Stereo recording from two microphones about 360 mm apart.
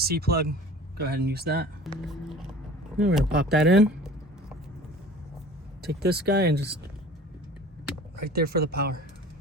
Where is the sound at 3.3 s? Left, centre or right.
Right.